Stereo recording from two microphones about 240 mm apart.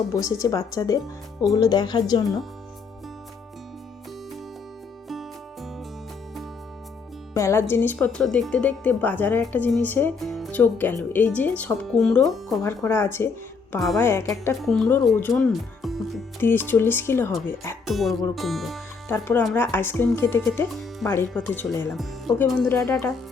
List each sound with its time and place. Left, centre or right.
0.1 s speech: centre
7.3 s speech: centre
17.8 s speech: centre